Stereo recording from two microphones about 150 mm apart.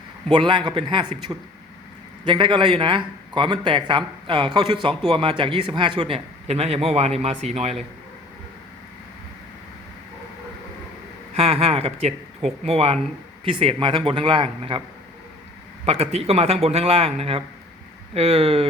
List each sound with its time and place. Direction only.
0.3 s a man's voice: 30° right (ahead or behind)
11.3 s a man's voice: 40° right (ahead or behind)
15.9 s a man's voice: 40° right (ahead or behind)